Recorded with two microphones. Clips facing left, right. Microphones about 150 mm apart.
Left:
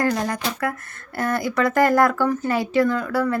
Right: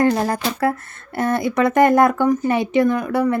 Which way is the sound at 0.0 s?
30° right (ahead or behind).